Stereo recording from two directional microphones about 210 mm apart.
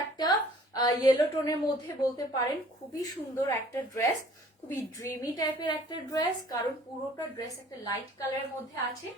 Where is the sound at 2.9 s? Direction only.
15° left (ahead or behind).